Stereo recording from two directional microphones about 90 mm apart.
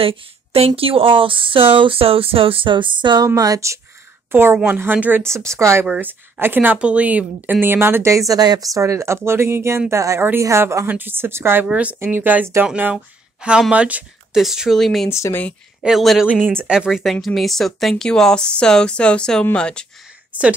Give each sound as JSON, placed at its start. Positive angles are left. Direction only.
{"t": 0.0, "sound": "speech", "side_deg": -90}
{"t": 3.3, "sound": "speech", "side_deg": -40}
{"t": 4.3, "sound": "a woman's voice", "side_deg": -25}
{"t": 5.2, "sound": "speech", "side_deg": -30}
{"t": 5.9, "sound": "a woman's voice", "side_deg": -20}
{"t": 10.9, "sound": "a woman's voice", "side_deg": -20}
{"t": 11.6, "sound": "a woman's voice", "side_deg": -15}
{"t": 12.9, "sound": "speech", "side_deg": -10}
{"t": 15.0, "sound": "speech", "side_deg": 35}
{"t": 15.8, "sound": "speech", "side_deg": 0}
{"t": 16.3, "sound": "speech", "side_deg": -15}